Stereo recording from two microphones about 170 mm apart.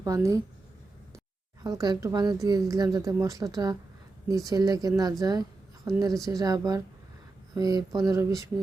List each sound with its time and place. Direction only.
0.0 s speech: 20° right (ahead or behind)
1.6 s speech: 20° right (ahead or behind)